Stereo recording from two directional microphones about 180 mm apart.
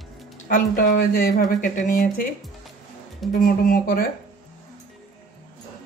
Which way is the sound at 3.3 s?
55° left (ahead or behind).